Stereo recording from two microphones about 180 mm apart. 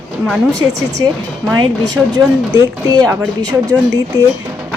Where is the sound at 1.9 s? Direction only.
20° right (ahead or behind).